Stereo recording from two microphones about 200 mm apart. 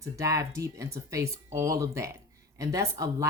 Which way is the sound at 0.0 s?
15° right (ahead or behind).